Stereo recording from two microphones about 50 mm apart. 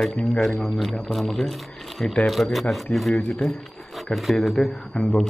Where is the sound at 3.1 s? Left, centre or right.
Centre.